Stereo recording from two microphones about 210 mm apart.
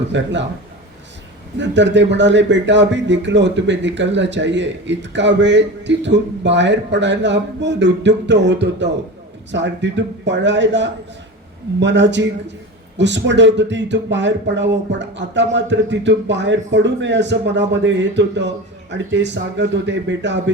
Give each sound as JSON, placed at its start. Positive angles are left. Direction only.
{"t": 0.1, "sound": "speech", "side_deg": -60}
{"t": 1.5, "sound": "speech", "side_deg": -60}